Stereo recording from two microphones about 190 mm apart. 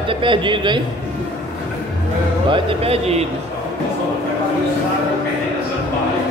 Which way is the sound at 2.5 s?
30° right (ahead or behind).